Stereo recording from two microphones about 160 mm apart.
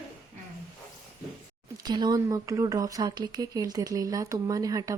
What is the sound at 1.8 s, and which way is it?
Speech, 25° right (ahead or behind).